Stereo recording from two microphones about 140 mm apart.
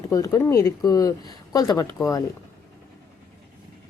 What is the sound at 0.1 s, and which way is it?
Speech, 25° left (ahead or behind).